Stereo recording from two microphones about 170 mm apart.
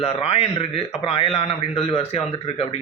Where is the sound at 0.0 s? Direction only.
35° left (ahead or behind).